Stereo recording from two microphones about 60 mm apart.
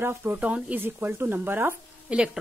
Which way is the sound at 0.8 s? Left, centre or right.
Right.